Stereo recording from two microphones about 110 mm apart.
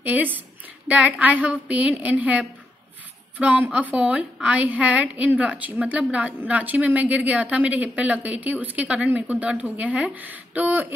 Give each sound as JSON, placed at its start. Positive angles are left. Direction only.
{"t": 0.0, "sound": "a woman's voice", "side_deg": -15}